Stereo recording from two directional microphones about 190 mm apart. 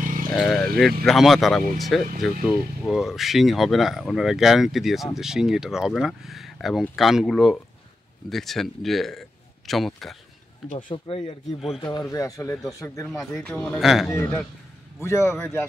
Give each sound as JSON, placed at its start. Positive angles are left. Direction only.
{"t": 0.0, "sound": "vehicle", "side_deg": -45}
{"t": 0.3, "sound": "a man's voice", "side_deg": 0}
{"t": 10.7, "sound": "speech", "side_deg": 30}
{"t": 13.4, "sound": "speech", "side_deg": 5}
{"t": 14.1, "sound": "speech", "side_deg": 15}